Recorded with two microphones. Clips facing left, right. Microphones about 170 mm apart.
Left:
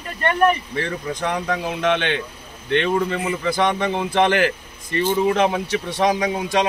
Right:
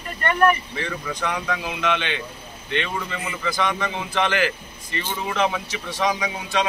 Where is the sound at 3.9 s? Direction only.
55° left (ahead or behind).